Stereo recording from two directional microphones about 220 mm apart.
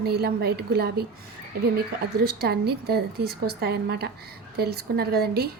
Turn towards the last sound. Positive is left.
turn(degrees=-45)  # may be behind; listen again after turning